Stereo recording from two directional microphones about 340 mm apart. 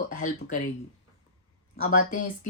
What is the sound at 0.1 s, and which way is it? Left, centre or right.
Speech, left.